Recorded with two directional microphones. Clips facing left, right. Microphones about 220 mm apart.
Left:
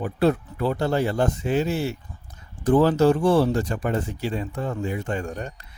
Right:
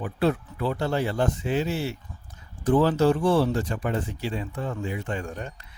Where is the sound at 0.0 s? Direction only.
40° left (ahead or behind).